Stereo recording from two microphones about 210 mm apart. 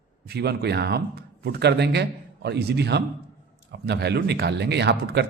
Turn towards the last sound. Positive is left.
turn(degrees=-55)  # may be behind; listen again after turning